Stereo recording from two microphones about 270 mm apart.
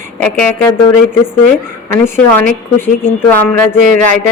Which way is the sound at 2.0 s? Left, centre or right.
Centre.